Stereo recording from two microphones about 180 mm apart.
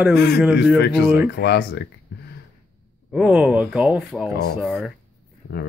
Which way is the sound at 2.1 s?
60° left (ahead or behind).